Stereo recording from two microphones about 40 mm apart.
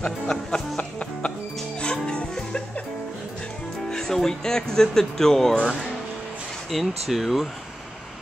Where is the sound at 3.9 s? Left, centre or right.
Centre.